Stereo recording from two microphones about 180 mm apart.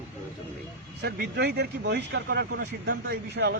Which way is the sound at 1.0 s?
65° right (ahead or behind).